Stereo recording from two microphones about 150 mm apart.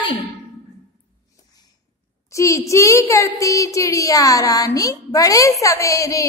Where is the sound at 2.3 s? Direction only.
20° left (ahead or behind).